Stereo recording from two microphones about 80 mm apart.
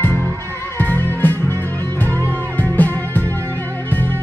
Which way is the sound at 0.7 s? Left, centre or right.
Left.